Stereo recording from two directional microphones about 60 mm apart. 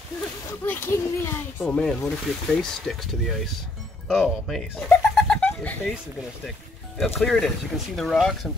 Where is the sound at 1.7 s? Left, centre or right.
Centre.